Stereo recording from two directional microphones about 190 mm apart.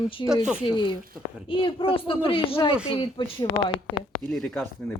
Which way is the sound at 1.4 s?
25° left (ahead or behind).